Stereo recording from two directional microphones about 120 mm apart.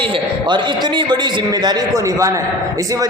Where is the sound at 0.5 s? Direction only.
40° right (ahead or behind).